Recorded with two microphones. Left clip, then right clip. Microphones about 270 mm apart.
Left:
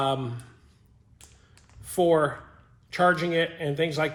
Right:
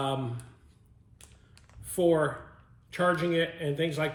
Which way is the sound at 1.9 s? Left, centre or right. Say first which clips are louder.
Left 3 dB; left.